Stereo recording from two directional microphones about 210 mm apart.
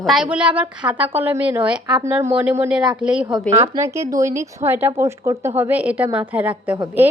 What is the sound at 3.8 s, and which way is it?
Speech, 15° right (ahead or behind).